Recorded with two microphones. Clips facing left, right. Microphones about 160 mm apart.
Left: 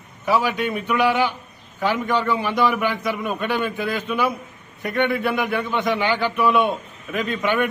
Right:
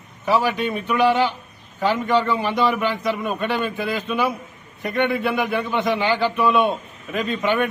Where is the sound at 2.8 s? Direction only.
15° left (ahead or behind).